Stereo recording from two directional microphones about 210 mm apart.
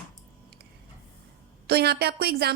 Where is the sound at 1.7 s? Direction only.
50° right (ahead or behind).